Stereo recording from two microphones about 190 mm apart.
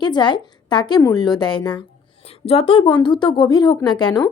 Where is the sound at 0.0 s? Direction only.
25° left (ahead or behind).